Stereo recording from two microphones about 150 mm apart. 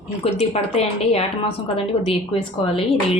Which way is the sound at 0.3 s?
45° left (ahead or behind).